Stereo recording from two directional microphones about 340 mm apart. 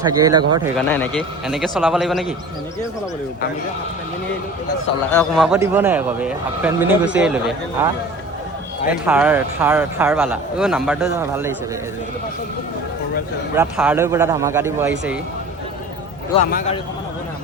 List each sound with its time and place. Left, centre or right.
0.0 s a man's voice: centre
0.9 s speech: centre
5.1 s speech: centre
8.9 s speech: centre
13.6 s a man's voice: centre
16.5 s a man's voice: left